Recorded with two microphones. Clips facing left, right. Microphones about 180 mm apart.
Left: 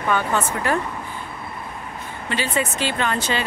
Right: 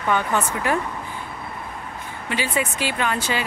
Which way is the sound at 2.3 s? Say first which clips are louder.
Left 1 dB; 10° right (ahead or behind).